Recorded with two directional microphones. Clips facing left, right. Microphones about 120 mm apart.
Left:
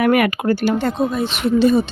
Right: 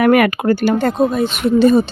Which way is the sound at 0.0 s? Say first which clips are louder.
Right 3 dB; 50° right (ahead or behind).